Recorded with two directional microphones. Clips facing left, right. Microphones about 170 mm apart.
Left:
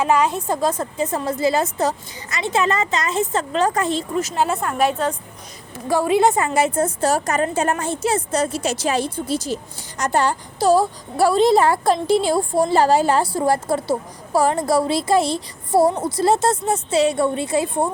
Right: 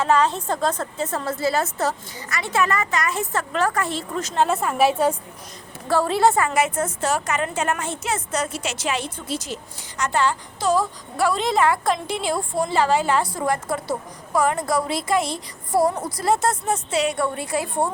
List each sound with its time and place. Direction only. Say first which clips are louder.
0.0 s a woman's voice: left 1 dB; 10° left (ahead or behind)
4.2 s a woman's voice: right 3 dB; 5° left (ahead or behind)
5.9 s a woman's voice: left 2 dB; 15° left (ahead or behind)